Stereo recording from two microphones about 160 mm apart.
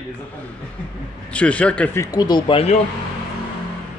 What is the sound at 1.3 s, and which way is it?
Speech, 10° left (ahead or behind).